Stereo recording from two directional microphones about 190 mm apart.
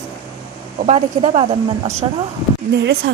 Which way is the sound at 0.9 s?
35° right (ahead or behind).